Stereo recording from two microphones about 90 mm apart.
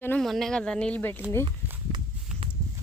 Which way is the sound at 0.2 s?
5° left (ahead or behind).